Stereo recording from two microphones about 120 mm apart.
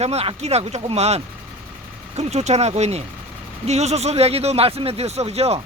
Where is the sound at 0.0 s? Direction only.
60° right (ahead or behind).